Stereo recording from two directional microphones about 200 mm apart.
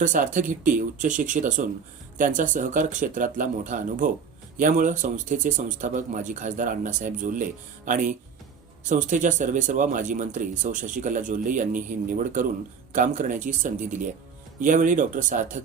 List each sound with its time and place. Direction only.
0.0 s speech: 40° right (ahead or behind)